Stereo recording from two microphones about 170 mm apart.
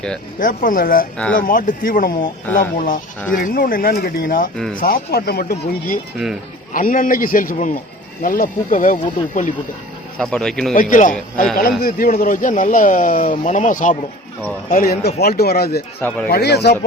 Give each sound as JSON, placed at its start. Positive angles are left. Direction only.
{"t": 0.3, "sound": "speech", "side_deg": 55}
{"t": 1.1, "sound": "speech", "side_deg": 5}
{"t": 1.4, "sound": "speech", "side_deg": 55}
{"t": 10.2, "sound": "speech", "side_deg": 5}
{"t": 10.8, "sound": "speech", "side_deg": 50}
{"t": 14.7, "sound": "speech", "side_deg": 60}
{"t": 16.0, "sound": "speech", "side_deg": 10}
{"t": 16.3, "sound": "speech", "side_deg": 70}